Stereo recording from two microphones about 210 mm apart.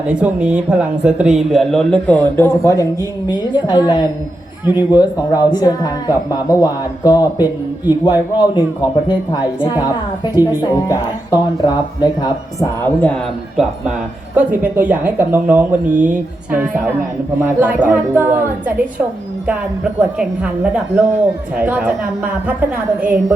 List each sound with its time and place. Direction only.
0.1 s a man's voice: 5° right (ahead or behind)
14.3 s a man's voice: 5° right (ahead or behind)